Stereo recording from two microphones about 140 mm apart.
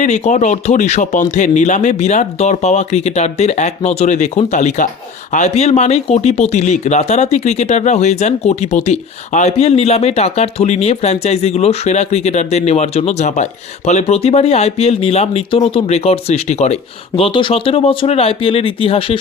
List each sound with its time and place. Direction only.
0.0 s speech: 60° left (ahead or behind); by 19.2 s 40° left (ahead or behind)